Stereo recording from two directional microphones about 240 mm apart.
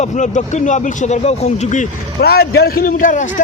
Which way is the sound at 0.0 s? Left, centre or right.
Left.